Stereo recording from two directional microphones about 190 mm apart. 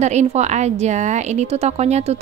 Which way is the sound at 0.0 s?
35° right (ahead or behind).